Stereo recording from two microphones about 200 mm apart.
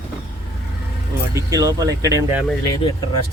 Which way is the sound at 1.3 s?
15° right (ahead or behind).